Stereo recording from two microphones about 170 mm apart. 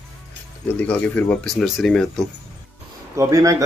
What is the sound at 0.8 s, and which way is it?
Speech, 10° left (ahead or behind).